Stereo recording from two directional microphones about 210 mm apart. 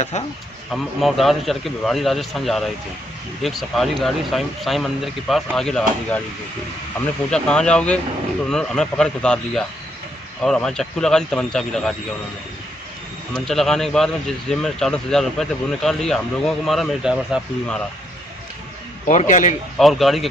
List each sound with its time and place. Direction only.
0.7 s a man's voice: centre (ahead or behind)
7.2 s a man's voice: 5° left (ahead or behind)
13.3 s a man's voice: centre (ahead or behind)
19.0 s a man's voice: 35° left (ahead or behind)
19.8 s a man's voice: centre (ahead or behind)